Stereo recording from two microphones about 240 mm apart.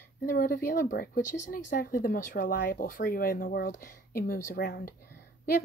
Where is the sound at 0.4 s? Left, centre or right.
Left.